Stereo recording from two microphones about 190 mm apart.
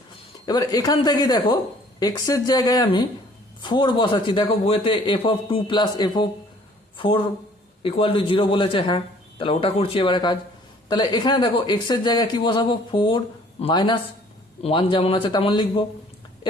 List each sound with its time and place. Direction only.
0.4 s speech: 20° left (ahead or behind)
7.8 s speech: 30° left (ahead or behind)